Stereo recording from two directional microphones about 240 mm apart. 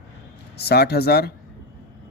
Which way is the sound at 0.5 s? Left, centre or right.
Left.